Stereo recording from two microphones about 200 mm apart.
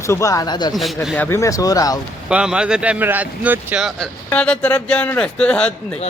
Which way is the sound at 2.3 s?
5° right (ahead or behind).